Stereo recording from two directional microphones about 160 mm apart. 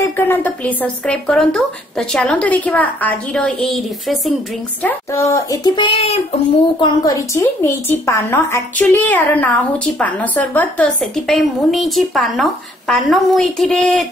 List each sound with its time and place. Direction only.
0.0 s a woman's voice: 10° left (ahead or behind)
4.8 s speech: 20° left (ahead or behind); by 6.1 s 35° left (ahead or behind)
6.8 s a woman's voice: 25° left (ahead or behind); by 14.0 s 5° left (ahead or behind)